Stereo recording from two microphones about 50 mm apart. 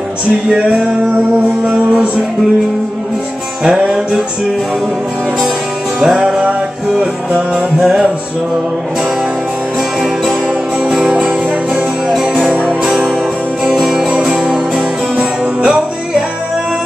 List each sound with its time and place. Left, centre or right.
0.6 s music: right
3.6 s music: centre
5.9 s music: centre
10.8 s music: centre
12.4 s music: right
13.7 s music: centre